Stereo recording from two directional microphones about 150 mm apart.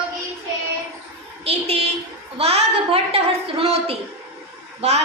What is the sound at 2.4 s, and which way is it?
A woman's voice, 45° right (ahead or behind).